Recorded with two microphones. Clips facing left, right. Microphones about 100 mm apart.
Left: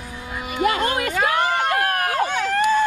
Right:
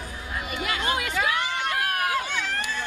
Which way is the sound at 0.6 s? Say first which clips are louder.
Left 8 dB; 50° left (ahead or behind).